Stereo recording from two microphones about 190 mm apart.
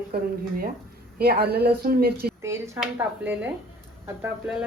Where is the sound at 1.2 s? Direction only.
55° right (ahead or behind).